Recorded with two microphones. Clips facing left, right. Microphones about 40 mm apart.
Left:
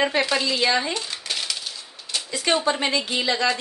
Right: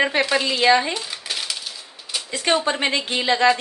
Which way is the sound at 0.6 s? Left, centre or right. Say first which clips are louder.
Right 7 dB; centre.